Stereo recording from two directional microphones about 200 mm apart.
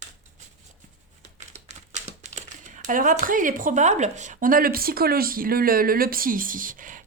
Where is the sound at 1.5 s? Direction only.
35° right (ahead or behind).